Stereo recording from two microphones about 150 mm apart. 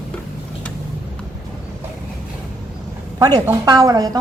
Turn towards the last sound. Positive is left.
turn(degrees=-25)  # may be behind; listen again after turning